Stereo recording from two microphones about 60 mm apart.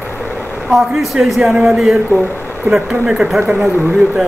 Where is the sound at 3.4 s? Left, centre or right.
Right.